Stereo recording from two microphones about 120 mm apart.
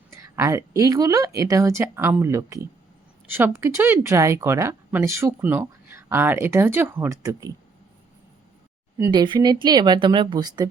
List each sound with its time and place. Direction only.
0.1 s speech: 25° right (ahead or behind)
9.0 s speech: 40° right (ahead or behind)